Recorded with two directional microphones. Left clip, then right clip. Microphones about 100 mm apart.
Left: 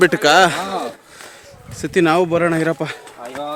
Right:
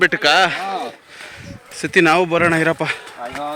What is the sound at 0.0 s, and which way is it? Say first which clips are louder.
Speech: left 2 dB; 5° right (ahead or behind).